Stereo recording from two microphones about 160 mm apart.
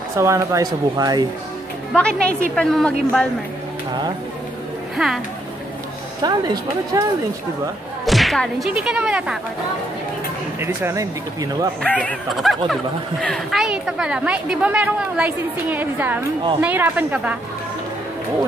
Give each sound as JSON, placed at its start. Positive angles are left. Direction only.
{"t": 0.2, "sound": "speech", "side_deg": -20}
{"t": 2.0, "sound": "a woman's voice", "side_deg": 5}
{"t": 4.9, "sound": "speech", "side_deg": -5}
{"t": 6.2, "sound": "speech", "side_deg": -25}
{"t": 8.0, "sound": "speech", "side_deg": 0}
{"t": 10.6, "sound": "a woman's voice", "side_deg": -15}
{"t": 11.8, "sound": "a woman's voice", "side_deg": 10}